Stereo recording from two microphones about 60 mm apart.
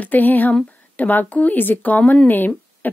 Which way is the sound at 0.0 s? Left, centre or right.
Left.